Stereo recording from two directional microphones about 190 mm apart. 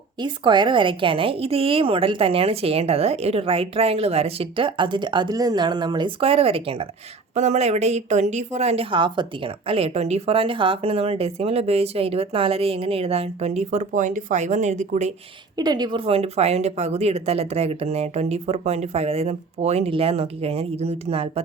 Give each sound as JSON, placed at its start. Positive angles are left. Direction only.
{"t": 0.2, "sound": "a woman's voice", "side_deg": -25}
{"t": 15.5, "sound": "speech", "side_deg": -20}